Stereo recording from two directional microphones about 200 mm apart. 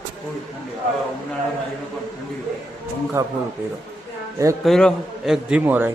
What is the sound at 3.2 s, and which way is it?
Speech, 20° right (ahead or behind).